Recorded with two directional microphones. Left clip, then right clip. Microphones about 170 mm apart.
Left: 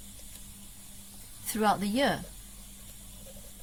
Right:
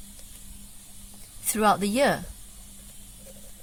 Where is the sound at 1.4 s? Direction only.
35° right (ahead or behind).